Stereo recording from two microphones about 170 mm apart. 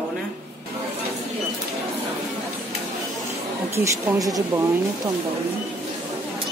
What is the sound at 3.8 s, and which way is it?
Speech, 20° right (ahead or behind).